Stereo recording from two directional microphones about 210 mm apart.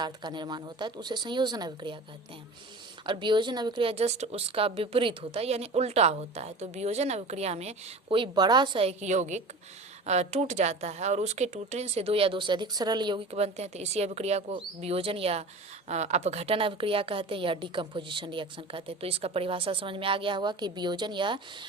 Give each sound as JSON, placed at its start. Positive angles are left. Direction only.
{"t": 0.0, "sound": "a woman's voice", "side_deg": -20}
{"t": 3.1, "sound": "a woman's voice", "side_deg": -20}